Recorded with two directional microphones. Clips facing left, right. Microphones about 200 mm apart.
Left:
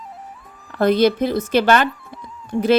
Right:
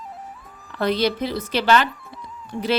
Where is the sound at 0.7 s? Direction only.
50° left (ahead or behind).